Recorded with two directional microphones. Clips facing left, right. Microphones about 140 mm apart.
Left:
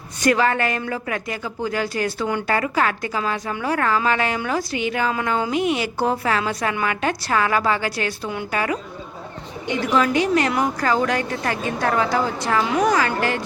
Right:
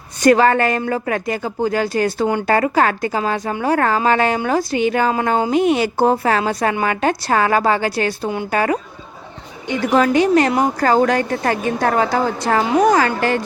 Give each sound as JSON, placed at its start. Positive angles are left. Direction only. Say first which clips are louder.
{"t": 0.2, "sound": "a woman's voice", "louder": "right 6 dB", "side_deg": -40}
{"t": 2.2, "sound": "speech", "louder": "right 5 dB", "side_deg": -25}
{"t": 2.6, "sound": "a woman's voice", "louder": "right 5 dB", "side_deg": -40}
{"t": 9.9, "sound": "a woman's voice", "louder": "right 5 dB", "side_deg": -40}